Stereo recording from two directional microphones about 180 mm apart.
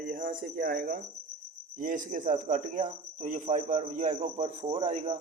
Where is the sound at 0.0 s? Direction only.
55° right (ahead or behind).